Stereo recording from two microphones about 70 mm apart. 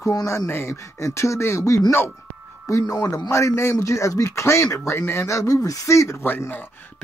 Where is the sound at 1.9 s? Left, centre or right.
Left.